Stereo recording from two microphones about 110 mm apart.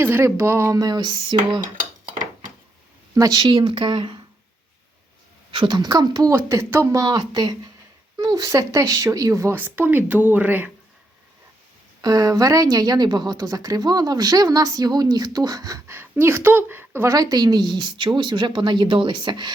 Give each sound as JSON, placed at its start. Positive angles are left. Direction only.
{"t": 0.0, "sound": "speech", "side_deg": -20}
{"t": 3.2, "sound": "a woman's voice", "side_deg": -35}
{"t": 5.5, "sound": "a woman's voice", "side_deg": -45}
{"t": 6.3, "sound": "a woman's voice", "side_deg": -25}
{"t": 9.6, "sound": "speech", "side_deg": -15}
{"t": 12.0, "sound": "a woman's voice", "side_deg": -35}
{"t": 16.0, "sound": "a woman's voice", "side_deg": -20}
{"t": 17.1, "sound": "a woman's voice", "side_deg": -35}